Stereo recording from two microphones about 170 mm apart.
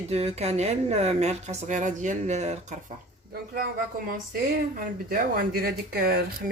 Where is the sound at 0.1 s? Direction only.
40° right (ahead or behind).